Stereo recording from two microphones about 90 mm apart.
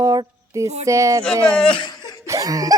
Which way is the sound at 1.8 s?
50° left (ahead or behind).